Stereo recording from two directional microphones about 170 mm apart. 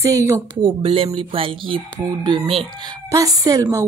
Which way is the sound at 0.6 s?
30° right (ahead or behind).